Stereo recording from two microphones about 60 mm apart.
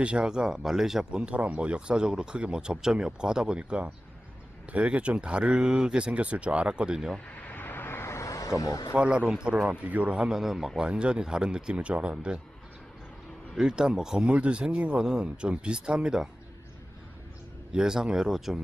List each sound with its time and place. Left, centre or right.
0.0 s speech: centre
7.3 s a sound: left
9.0 s a man's voice: centre
10.2 s speech: centre
13.6 s speech: centre
17.7 s speech: centre